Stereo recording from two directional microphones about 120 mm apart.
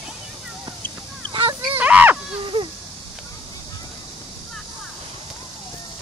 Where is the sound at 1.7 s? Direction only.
15° right (ahead or behind).